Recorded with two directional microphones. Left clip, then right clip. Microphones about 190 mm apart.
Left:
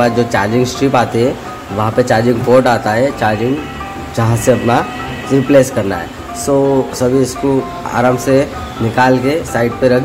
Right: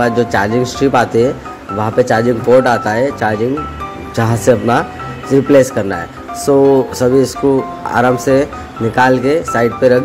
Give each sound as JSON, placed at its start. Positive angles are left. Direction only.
{"t": 0.0, "sound": "speech", "side_deg": -15}